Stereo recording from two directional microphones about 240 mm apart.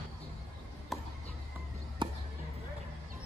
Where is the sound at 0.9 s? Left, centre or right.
Centre.